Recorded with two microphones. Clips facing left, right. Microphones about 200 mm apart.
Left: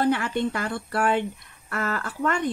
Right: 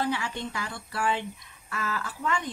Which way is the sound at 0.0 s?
55° left (ahead or behind).